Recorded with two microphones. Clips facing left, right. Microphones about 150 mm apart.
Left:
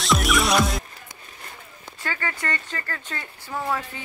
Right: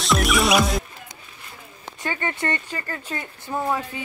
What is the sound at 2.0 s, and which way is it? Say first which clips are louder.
Speech: right 3 dB; 25° right (ahead or behind).